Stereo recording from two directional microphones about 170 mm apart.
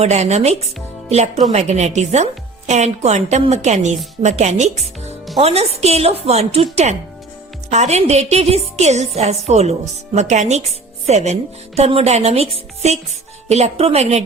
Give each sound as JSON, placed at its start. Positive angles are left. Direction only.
{"t": 0.0, "sound": "a woman's voice", "side_deg": -40}
{"t": 7.7, "sound": "a woman's voice", "side_deg": -40}